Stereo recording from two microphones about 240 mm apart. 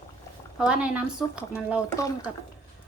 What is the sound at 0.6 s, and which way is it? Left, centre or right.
Speech, centre.